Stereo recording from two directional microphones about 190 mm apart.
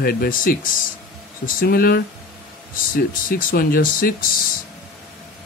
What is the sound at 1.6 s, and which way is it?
Speech, 50° left (ahead or behind).